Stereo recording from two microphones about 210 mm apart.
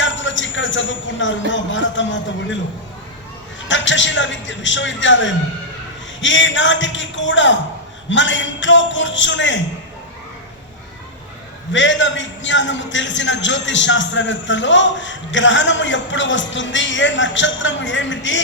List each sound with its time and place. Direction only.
0.0 s a man's voice: 60° left (ahead or behind)
3.7 s a man's voice: 60° left (ahead or behind)
11.7 s a man's voice: 60° left (ahead or behind)